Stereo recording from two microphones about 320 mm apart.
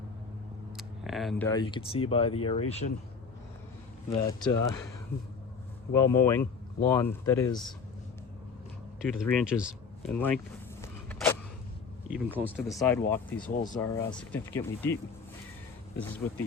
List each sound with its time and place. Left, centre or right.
0.8 s speech: centre
4.1 s speech: centre
5.9 s speech: centre
9.0 s a sound: centre
12.1 s speech: centre